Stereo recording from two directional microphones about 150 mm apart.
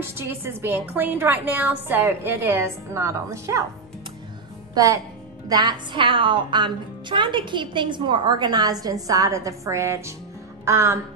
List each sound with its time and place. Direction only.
0.1 s a woman's voice: 15° right (ahead or behind)
4.7 s a woman's voice: 20° right (ahead or behind)
10.6 s music: 15° right (ahead or behind)